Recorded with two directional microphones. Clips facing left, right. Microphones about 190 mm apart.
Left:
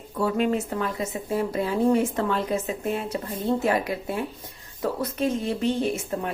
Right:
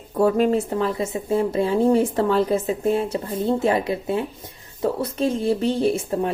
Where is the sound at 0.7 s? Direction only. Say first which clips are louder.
Right 5 dB; 30° right (ahead or behind).